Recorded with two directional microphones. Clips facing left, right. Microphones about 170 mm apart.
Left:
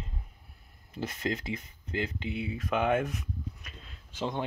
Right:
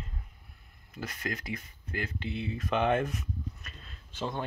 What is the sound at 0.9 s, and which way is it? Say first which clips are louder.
Speech: left 4 dB; 25° left (ahead or behind).